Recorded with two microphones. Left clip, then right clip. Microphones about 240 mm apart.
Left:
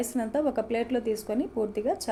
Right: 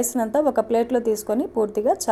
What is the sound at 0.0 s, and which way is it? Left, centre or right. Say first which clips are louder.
A woman's voice: right 7 dB; right.